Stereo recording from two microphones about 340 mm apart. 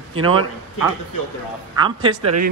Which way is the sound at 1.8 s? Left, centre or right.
Centre.